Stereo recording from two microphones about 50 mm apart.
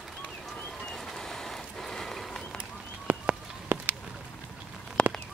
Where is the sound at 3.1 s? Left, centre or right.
Right.